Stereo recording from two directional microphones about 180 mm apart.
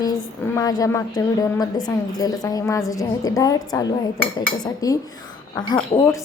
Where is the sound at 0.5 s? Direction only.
20° left (ahead or behind).